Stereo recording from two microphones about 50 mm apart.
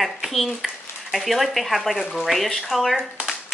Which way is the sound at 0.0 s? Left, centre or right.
Centre.